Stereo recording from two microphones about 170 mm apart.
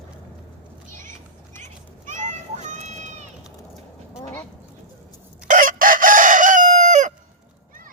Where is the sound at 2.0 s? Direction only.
45° right (ahead or behind).